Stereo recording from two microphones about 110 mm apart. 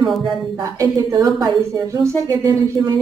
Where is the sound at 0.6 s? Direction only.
35° right (ahead or behind).